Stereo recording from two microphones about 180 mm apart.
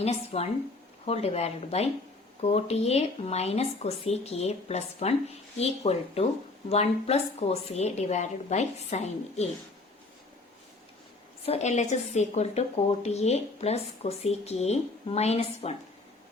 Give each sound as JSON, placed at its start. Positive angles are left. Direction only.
{"t": 0.0, "sound": "a woman's voice", "side_deg": 35}
{"t": 11.4, "sound": "a woman's voice", "side_deg": 40}